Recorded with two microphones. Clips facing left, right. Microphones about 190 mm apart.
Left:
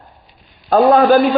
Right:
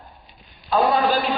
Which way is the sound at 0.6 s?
50° left (ahead or behind).